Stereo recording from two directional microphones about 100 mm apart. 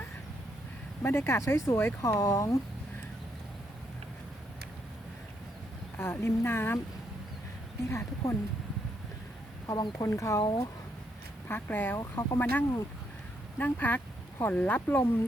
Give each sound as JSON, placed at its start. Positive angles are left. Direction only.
{"t": 1.0, "sound": "speech", "side_deg": 25}
{"t": 6.0, "sound": "speech", "side_deg": 25}
{"t": 7.9, "sound": "speech", "side_deg": 25}
{"t": 9.6, "sound": "speech", "side_deg": 40}
{"t": 10.4, "sound": "speech", "side_deg": 45}
{"t": 11.4, "sound": "speech", "side_deg": 20}